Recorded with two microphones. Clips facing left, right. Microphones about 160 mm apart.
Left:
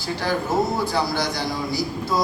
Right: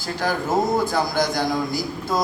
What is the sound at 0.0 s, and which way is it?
A man's voice, 45° right (ahead or behind).